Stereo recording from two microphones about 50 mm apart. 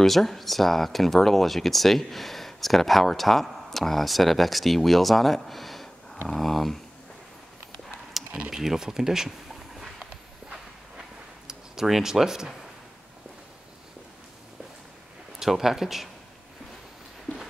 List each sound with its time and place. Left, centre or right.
0.0 s speech: centre
5.4 s a sound: centre
6.2 s speech: centre
8.4 s speech: centre
10.5 s a sound: centre
15.3 s speech: centre